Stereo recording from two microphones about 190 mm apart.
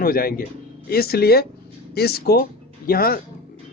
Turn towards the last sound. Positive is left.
turn(degrees=50)  # may be behind; listen again after turning